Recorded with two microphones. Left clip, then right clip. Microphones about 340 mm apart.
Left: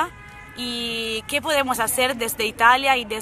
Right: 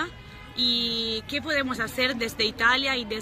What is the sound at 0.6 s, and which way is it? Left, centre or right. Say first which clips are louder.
Music: right 2 dB; left.